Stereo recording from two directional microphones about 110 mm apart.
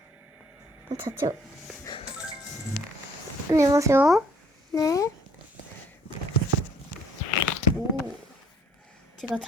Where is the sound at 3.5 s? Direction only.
30° right (ahead or behind).